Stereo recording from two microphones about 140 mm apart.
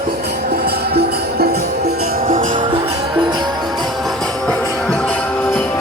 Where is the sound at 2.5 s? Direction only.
35° right (ahead or behind).